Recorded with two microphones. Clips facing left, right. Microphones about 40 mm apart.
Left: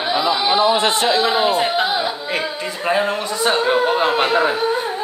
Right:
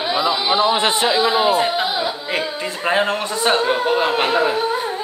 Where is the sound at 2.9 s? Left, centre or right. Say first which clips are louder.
Even; right.